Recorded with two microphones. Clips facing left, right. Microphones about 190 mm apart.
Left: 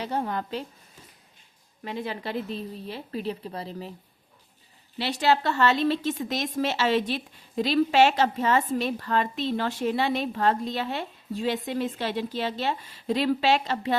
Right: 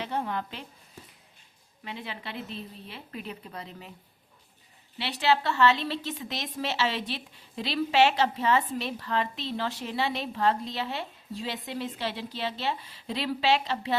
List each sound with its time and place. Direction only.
0.0 s a sound: 40° left (ahead or behind)
1.8 s a woman's voice: 40° left (ahead or behind)
4.9 s speech: 45° left (ahead or behind)